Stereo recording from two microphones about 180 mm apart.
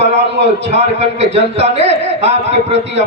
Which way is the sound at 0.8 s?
35° right (ahead or behind).